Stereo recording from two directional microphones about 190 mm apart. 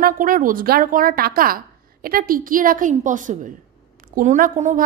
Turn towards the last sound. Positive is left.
turn(degrees=-40)  # may be behind; listen again after turning